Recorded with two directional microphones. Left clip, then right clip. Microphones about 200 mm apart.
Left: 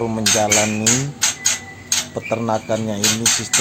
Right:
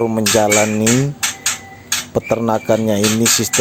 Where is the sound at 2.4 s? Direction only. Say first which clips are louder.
Right 3 dB; 35° right (ahead or behind).